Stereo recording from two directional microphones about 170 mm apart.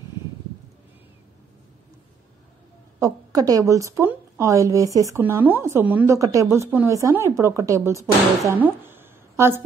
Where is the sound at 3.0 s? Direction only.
20° right (ahead or behind).